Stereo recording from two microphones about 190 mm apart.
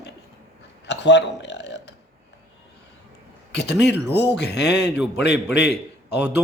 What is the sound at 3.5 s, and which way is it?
Speech, 65° left (ahead or behind).